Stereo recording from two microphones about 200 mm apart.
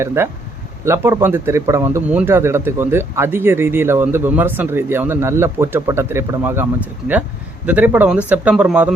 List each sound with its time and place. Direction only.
0.0 s a man's voice: 15° right (ahead or behind)